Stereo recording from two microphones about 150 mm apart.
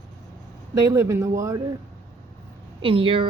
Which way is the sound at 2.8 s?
35° right (ahead or behind).